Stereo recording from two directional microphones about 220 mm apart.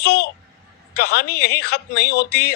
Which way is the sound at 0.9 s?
45° left (ahead or behind).